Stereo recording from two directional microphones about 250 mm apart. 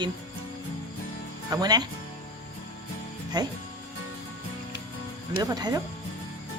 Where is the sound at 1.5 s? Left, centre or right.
Centre.